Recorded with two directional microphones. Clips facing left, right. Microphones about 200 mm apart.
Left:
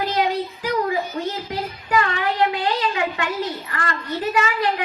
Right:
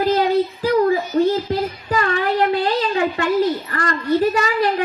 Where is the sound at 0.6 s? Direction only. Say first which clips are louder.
Right 4 dB; 35° right (ahead or behind).